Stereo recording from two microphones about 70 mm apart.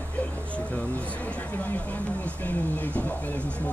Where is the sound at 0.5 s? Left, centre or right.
Centre.